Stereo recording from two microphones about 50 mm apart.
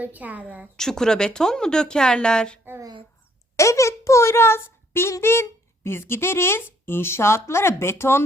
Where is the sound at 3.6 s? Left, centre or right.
Left.